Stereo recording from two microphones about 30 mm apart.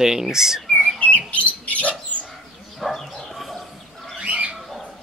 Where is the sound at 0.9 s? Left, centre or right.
Left.